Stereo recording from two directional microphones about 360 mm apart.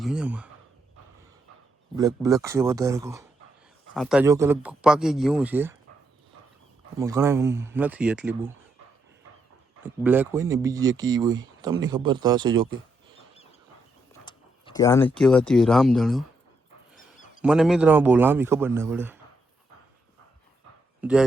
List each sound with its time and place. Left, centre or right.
0.0 s speech: centre
2.0 s speech: centre
7.0 s speech: centre
9.8 s speech: centre
14.1 s speech: centre
16.9 s a sound: left
17.4 s speech: centre
21.0 s speech: centre